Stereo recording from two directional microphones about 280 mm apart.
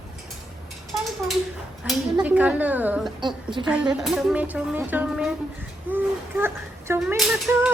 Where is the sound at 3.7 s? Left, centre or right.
Centre.